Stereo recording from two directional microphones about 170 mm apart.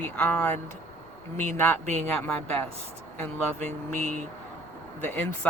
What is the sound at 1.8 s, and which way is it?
Speech, 45° right (ahead or behind).